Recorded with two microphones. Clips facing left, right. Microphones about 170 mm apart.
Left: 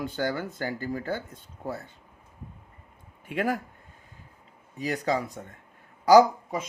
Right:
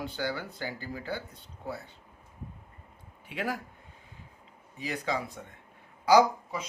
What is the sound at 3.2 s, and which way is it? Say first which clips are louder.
Speech: left 6 dB; 50° left (ahead or behind).